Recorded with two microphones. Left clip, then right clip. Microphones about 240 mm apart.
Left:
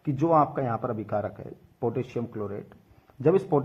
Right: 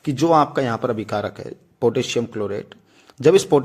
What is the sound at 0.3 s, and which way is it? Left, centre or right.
Speech, right.